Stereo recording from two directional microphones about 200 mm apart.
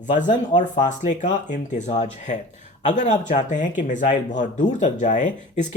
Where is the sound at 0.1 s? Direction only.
40° left (ahead or behind).